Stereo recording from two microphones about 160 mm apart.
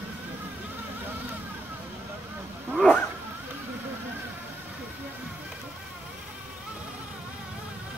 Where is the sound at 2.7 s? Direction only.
5° left (ahead or behind).